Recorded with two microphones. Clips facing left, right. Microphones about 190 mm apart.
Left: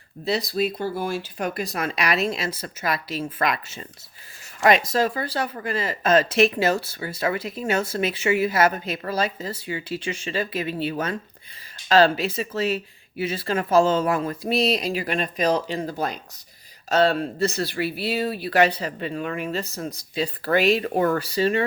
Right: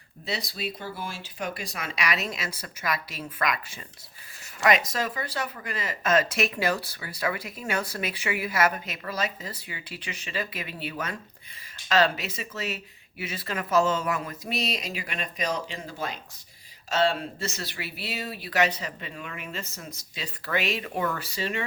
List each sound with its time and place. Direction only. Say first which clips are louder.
0.3 s speech: left 9 dB; 35° left (ahead or behind)